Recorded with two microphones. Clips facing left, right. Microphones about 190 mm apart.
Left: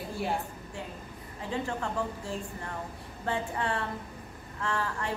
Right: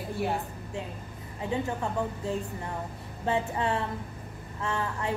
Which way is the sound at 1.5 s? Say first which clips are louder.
Right 2 dB; 20° right (ahead or behind).